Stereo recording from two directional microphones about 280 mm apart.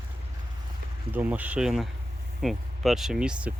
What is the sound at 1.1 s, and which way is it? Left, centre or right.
Speech, centre.